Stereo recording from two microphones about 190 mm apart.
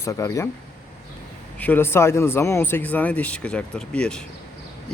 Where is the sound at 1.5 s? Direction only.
10° left (ahead or behind).